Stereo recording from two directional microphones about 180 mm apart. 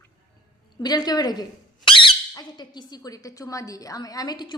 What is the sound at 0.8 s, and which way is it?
Speech, 20° left (ahead or behind).